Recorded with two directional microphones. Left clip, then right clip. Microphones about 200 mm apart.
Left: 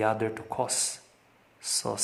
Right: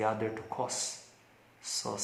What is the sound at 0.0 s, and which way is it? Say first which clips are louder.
Speech: left 4 dB; 45° left (ahead or behind).